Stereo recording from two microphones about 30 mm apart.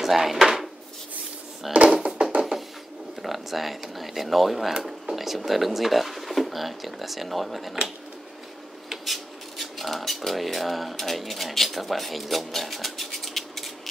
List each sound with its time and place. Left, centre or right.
0.0 s speech: centre
1.7 s speech: centre
2.2 s music: right
3.2 s speech: centre
8.8 s speech: centre